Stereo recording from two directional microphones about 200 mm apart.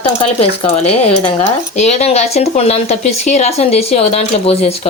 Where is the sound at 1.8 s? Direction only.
35° left (ahead or behind).